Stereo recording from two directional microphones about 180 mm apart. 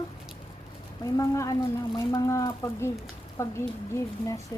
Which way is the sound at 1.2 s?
20° left (ahead or behind).